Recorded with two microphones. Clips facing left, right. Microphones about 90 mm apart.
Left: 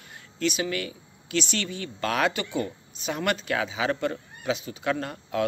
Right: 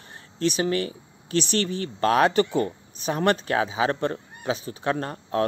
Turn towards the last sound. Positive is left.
turn(degrees=-40)  # may be behind; listen again after turning